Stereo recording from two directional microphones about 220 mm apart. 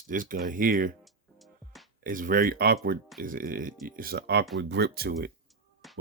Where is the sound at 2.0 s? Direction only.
40° right (ahead or behind).